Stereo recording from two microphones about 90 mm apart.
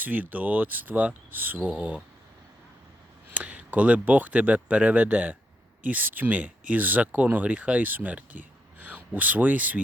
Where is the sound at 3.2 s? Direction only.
15° right (ahead or behind).